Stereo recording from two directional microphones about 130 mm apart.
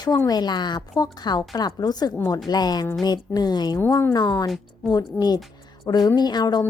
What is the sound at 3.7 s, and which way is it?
A woman's voice, 20° left (ahead or behind).